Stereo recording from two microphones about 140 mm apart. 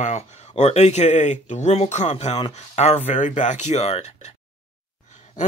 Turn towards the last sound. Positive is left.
turn(degrees=50)  # may be behind; listen again after turning